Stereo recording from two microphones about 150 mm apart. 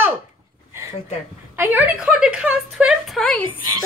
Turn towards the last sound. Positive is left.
turn(degrees=5)  # may be behind; listen again after turning